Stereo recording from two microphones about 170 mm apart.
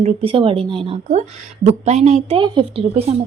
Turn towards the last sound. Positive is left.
turn(degrees=-35)  # may be behind; listen again after turning